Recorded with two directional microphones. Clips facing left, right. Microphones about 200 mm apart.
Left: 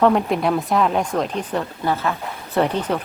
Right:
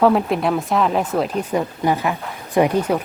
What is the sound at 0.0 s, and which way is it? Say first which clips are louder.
A woman's voice: right 1 dB; centre (ahead or behind).